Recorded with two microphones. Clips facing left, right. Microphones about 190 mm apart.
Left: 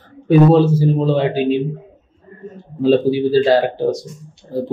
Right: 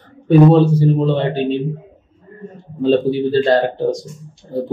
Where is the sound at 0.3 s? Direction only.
5° left (ahead or behind).